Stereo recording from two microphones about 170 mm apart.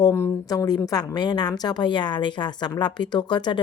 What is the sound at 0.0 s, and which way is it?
A woman's voice, 20° left (ahead or behind).